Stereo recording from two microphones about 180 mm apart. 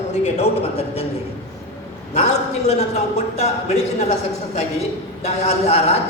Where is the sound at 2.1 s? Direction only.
40° left (ahead or behind).